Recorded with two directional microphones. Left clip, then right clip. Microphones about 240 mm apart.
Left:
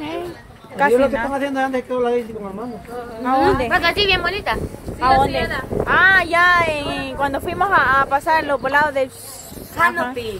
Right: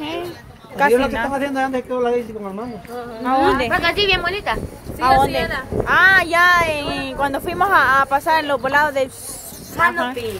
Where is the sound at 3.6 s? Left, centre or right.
Left.